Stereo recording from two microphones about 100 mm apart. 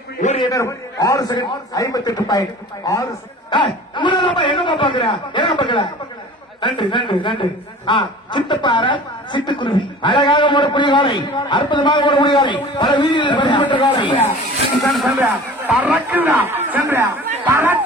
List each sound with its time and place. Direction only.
0.5 s a man's voice: 35° left (ahead or behind)
3.4 s a man's voice: 55° left (ahead or behind)
14.9 s speech: centre (ahead or behind)
15.8 s a man's voice: 20° right (ahead or behind)